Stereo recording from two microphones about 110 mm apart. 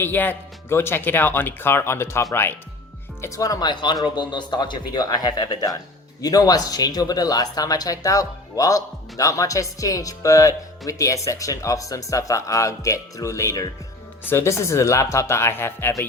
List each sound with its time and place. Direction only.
0.0 s speech: 15° left (ahead or behind)